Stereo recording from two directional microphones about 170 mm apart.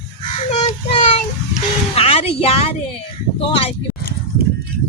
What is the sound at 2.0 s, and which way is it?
Speech, 35° left (ahead or behind).